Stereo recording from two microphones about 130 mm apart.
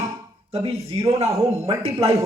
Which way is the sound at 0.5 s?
50° right (ahead or behind).